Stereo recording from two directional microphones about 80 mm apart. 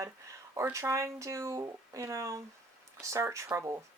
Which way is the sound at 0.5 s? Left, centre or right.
Right.